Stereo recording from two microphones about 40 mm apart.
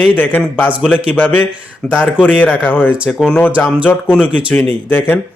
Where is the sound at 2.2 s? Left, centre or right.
Left.